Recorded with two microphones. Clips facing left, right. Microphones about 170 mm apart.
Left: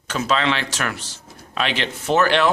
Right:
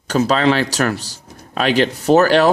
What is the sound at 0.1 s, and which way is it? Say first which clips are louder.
Speech: right 6 dB; 40° right (ahead or behind).